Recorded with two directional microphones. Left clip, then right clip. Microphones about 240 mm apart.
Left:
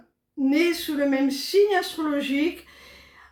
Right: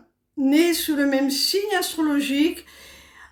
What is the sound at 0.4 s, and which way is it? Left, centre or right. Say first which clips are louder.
Speech: right 3 dB; right.